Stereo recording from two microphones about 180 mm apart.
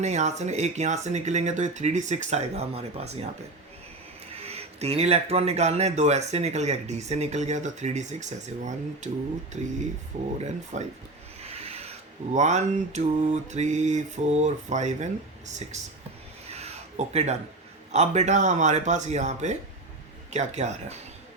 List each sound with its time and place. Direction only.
0.0 s speech: 40° right (ahead or behind)
4.4 s speech: 35° right (ahead or behind)
11.4 s mantra: 35° right (ahead or behind)
16.5 s a sound: 35° right (ahead or behind)
17.9 s speech: 40° right (ahead or behind)